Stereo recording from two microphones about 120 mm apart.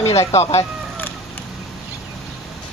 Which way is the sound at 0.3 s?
60° left (ahead or behind).